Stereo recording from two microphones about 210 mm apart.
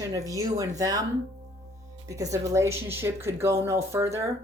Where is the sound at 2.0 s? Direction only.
15° right (ahead or behind).